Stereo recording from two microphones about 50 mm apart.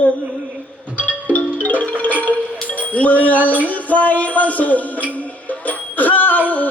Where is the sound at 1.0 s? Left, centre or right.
Left.